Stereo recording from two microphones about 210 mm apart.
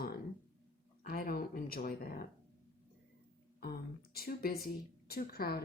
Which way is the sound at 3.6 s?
45° left (ahead or behind).